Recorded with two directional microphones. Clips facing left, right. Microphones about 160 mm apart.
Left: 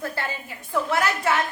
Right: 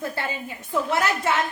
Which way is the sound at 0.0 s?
20° right (ahead or behind).